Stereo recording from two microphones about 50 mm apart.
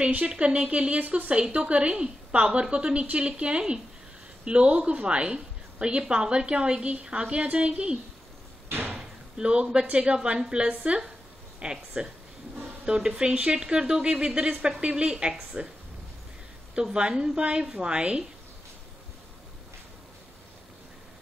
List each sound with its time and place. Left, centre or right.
0.3 s a woman's voice: right
8.6 s door: right
8.9 s a woman's voice: right
16.7 s a woman's voice: centre